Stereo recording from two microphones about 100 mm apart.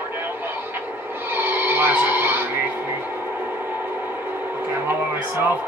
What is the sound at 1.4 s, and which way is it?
Music, 20° right (ahead or behind).